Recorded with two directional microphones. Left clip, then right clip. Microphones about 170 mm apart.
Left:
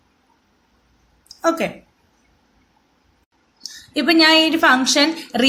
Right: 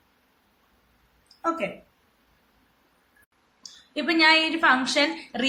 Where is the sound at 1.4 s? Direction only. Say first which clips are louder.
Left 8 dB; 55° left (ahead or behind).